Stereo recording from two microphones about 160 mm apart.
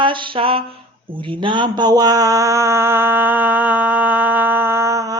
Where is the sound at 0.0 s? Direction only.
30° right (ahead or behind).